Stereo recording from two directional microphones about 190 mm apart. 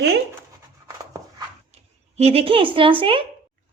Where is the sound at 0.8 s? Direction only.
20° right (ahead or behind).